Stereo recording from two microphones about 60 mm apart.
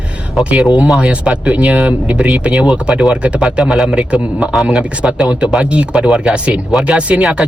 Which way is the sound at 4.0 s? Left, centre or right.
Centre.